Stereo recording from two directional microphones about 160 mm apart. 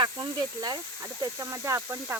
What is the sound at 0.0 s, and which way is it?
Speech, 25° right (ahead or behind).